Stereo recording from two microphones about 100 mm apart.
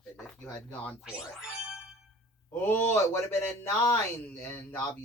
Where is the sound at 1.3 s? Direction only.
10° right (ahead or behind).